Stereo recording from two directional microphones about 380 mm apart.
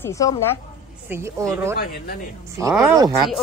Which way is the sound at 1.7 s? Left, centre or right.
Left.